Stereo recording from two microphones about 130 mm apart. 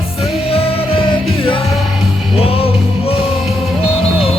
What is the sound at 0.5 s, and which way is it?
Music, 45° left (ahead or behind).